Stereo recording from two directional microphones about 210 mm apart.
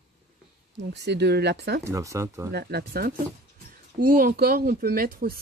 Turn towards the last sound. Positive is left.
turn(degrees=-45)  # may be behind; listen again after turning